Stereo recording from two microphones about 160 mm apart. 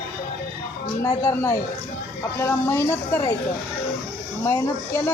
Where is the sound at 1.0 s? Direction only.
15° left (ahead or behind).